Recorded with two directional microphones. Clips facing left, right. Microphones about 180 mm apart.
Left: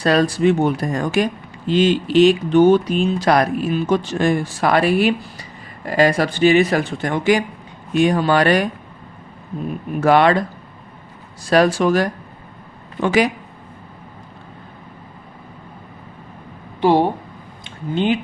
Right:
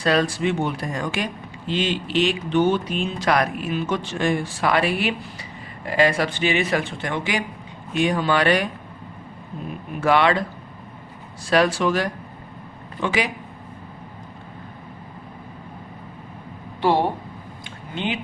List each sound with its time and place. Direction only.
0.0 s speech: 40° left (ahead or behind)
10.0 s speech: 45° left (ahead or behind)
11.4 s speech: 40° left (ahead or behind)
17.9 s speech: 40° left (ahead or behind)